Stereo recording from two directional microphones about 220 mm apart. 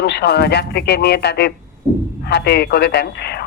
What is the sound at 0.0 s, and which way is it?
Speech, 50° left (ahead or behind).